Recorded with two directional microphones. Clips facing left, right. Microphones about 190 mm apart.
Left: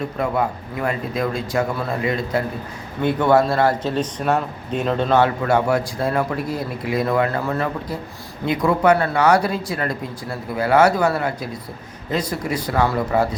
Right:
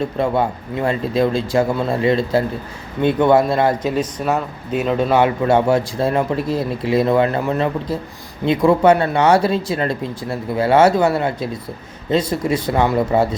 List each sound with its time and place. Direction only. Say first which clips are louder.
0.0 s speech: right 3 dB; 30° right (ahead or behind)
3.9 s speech: right 1 dB; 5° right (ahead or behind); by 13.2 s 25° right (ahead or behind)